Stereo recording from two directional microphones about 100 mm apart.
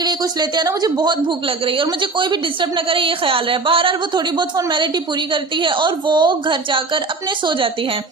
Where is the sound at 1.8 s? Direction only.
50° right (ahead or behind).